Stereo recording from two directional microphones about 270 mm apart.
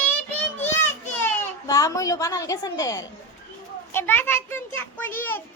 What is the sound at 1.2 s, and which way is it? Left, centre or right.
A child's voice, centre.